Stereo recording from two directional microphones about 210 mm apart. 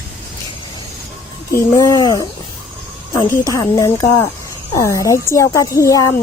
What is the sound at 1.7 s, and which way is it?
Speech, 15° left (ahead or behind).